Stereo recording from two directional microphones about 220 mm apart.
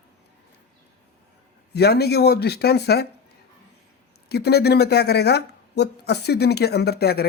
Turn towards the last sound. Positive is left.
turn(degrees=45)  # may be behind; listen again after turning